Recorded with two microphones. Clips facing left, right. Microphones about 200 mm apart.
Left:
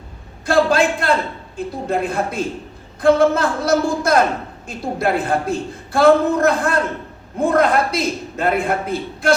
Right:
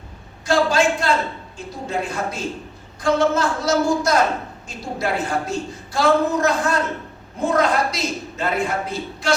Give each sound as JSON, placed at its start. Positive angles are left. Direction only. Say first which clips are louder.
{"t": 0.4, "sound": "a woman's voice", "louder": "left 2 dB", "side_deg": 55}